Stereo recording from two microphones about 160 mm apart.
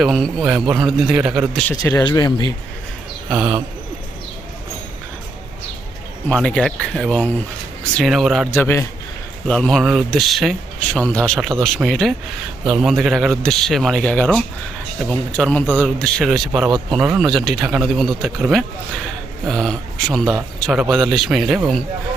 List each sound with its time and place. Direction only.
0.0 s speech: centre (ahead or behind)
1.7 s speech: 25° left (ahead or behind)
3.2 s speech: 5° right (ahead or behind)
6.2 s speech: 5° left (ahead or behind)
8.4 s a man's voice: 15° left (ahead or behind)
9.5 s a man's voice: 5° left (ahead or behind)